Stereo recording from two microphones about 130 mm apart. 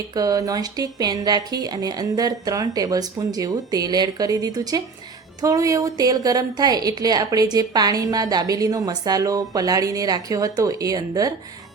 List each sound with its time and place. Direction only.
0.1 s a woman's voice: 30° right (ahead or behind)